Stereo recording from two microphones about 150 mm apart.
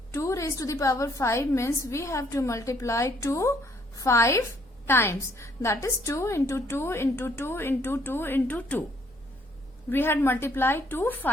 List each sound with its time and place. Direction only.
0.1 s a woman's voice: 20° left (ahead or behind)
9.9 s a woman's voice: 15° left (ahead or behind)